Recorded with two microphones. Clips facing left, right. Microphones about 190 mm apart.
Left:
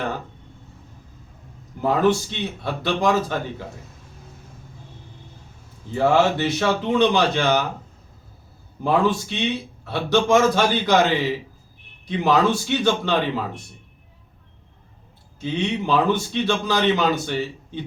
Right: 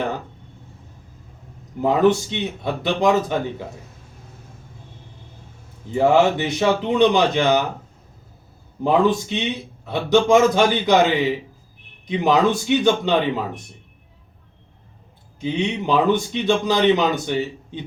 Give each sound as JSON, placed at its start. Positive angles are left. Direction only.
{"t": 1.8, "sound": "a man's voice", "side_deg": -15}
{"t": 5.9, "sound": "a man's voice", "side_deg": -15}
{"t": 8.8, "sound": "a man's voice", "side_deg": -20}
{"t": 15.4, "sound": "a man's voice", "side_deg": -15}